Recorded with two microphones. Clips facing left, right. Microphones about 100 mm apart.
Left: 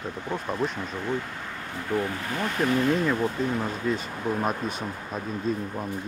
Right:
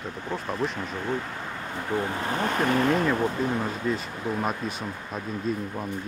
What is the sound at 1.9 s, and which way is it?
Speech, 25° right (ahead or behind).